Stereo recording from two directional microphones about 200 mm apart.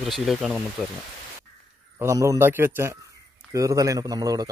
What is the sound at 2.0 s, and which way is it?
Speech, 15° right (ahead or behind).